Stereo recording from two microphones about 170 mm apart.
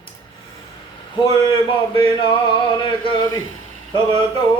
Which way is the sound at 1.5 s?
30° left (ahead or behind).